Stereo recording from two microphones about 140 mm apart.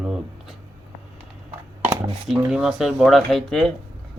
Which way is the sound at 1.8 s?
25° right (ahead or behind).